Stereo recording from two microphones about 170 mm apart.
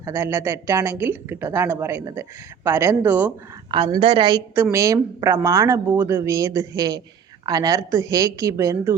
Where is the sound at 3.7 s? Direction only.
30° right (ahead or behind).